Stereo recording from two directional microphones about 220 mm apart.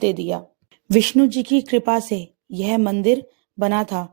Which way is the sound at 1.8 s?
30° right (ahead or behind).